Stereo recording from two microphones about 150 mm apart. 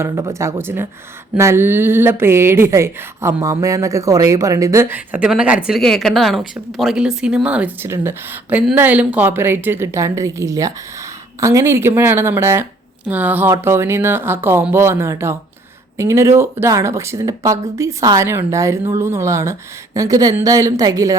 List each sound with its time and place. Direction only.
0.0 s speech: 20° right (ahead or behind)